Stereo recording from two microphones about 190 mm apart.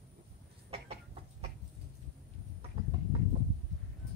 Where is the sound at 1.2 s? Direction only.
30° right (ahead or behind).